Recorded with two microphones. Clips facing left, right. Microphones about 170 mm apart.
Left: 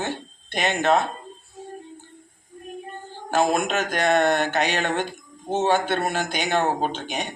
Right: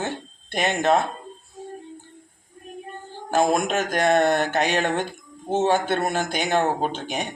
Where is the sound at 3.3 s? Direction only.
45° right (ahead or behind).